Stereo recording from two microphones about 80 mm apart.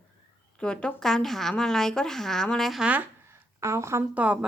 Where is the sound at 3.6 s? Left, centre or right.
Right.